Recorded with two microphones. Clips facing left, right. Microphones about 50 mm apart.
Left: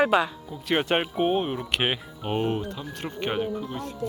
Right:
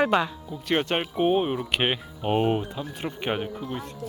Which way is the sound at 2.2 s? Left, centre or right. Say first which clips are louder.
Right 3 dB; centre.